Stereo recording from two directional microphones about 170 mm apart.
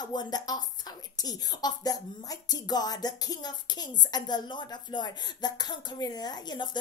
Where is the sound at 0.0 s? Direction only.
25° left (ahead or behind).